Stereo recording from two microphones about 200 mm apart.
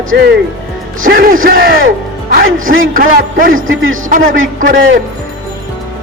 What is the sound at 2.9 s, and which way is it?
Music, 45° right (ahead or behind).